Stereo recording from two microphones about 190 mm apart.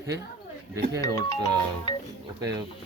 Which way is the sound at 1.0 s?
15° left (ahead or behind).